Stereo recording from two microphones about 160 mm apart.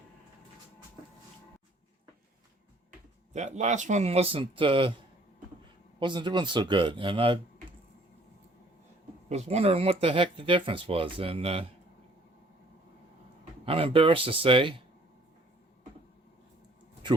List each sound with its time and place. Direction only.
3.3 s speech: 45° right (ahead or behind)
6.0 s speech: 30° right (ahead or behind)
9.3 s speech: 40° right (ahead or behind)
13.7 s speech: 35° right (ahead or behind)
17.0 s a sound: 30° right (ahead or behind)